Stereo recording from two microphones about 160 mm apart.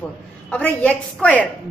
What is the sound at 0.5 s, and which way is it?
Speech, 10° left (ahead or behind).